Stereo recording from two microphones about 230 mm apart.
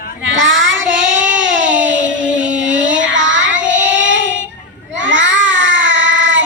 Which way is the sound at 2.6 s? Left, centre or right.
Right.